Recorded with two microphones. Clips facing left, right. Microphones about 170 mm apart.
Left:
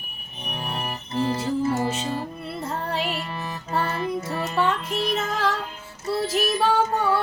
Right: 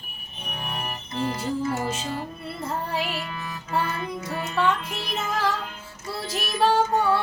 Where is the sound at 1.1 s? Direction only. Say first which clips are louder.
Left 3 dB; 30° left (ahead or behind).